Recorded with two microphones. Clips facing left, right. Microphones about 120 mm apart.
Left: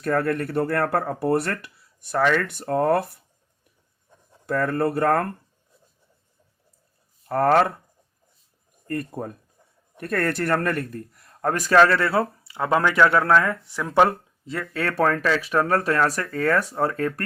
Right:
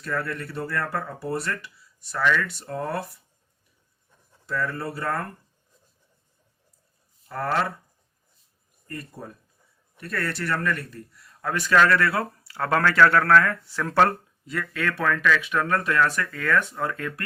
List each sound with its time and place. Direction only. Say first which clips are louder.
0.0 s speech: left 7 dB; 55° left (ahead or behind)
4.4 s speech: left 7 dB; 50° left (ahead or behind)
7.3 s speech: left 8 dB; 55° left (ahead or behind)
8.9 s a man's voice: left 9 dB; 50° left (ahead or behind); by 14.2 s 15° left (ahead or behind)
14.4 s speech: left 1 dB; 30° left (ahead or behind)